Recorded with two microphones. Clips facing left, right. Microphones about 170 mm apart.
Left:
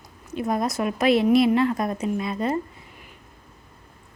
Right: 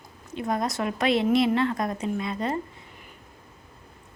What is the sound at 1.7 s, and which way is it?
Speech, 25° left (ahead or behind).